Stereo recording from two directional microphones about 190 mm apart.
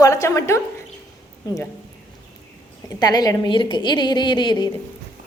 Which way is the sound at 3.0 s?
20° left (ahead or behind).